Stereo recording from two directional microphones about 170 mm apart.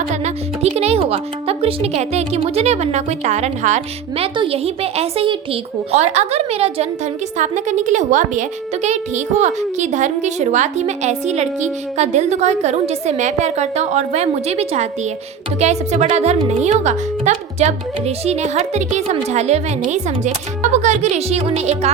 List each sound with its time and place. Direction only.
0.1 s a woman's voice: 40° right (ahead or behind)